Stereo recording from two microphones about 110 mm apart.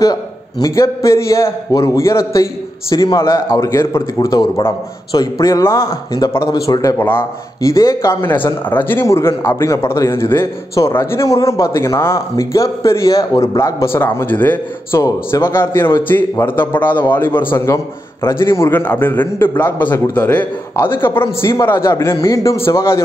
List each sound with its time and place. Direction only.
0.0 s a man's voice: 35° left (ahead or behind)
7.0 s a man's voice: 20° left (ahead or behind)